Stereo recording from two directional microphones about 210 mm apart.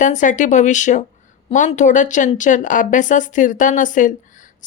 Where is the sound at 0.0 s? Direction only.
35° left (ahead or behind).